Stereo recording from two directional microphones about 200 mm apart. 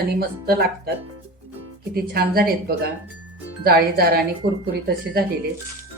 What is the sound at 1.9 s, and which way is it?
Speech, 50° right (ahead or behind).